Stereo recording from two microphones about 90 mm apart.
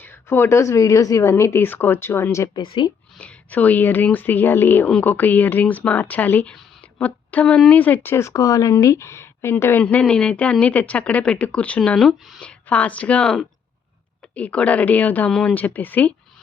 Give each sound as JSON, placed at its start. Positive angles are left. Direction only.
{"t": 0.0, "sound": "a woman's voice", "side_deg": 25}
{"t": 2.6, "sound": "speech", "side_deg": 65}
{"t": 3.2, "sound": "speech", "side_deg": 15}
{"t": 9.8, "sound": "speech", "side_deg": 15}
{"t": 11.9, "sound": "speech", "side_deg": 5}
{"t": 12.4, "sound": "speech", "side_deg": 15}